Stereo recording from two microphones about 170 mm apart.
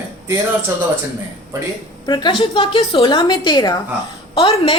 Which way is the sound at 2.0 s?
25° left (ahead or behind).